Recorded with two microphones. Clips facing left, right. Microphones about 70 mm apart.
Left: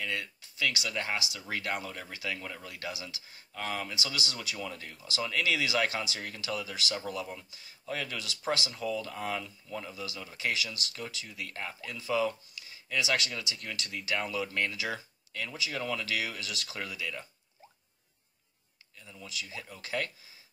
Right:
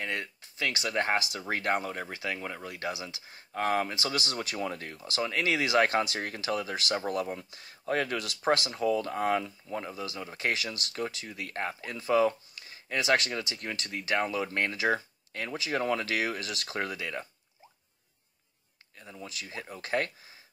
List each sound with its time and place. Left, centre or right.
0.0 s speech: right
1.5 s speech: right
4.2 s speech: right
18.9 s speech: right